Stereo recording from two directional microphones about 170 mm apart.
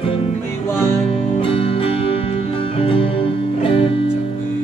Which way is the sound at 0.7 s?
15° left (ahead or behind).